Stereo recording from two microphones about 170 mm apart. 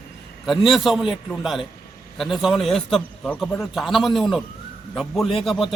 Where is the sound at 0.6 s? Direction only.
Centre (ahead or behind).